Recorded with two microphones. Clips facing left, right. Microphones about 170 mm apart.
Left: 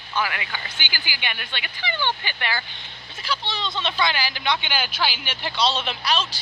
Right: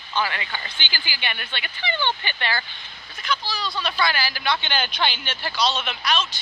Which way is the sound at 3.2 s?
25° left (ahead or behind).